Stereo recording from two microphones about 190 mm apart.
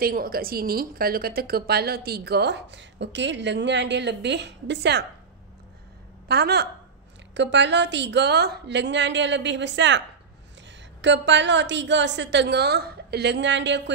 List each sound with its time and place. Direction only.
0.0 s a woman's voice: 50° right (ahead or behind)
6.2 s a woman's voice: 60° right (ahead or behind)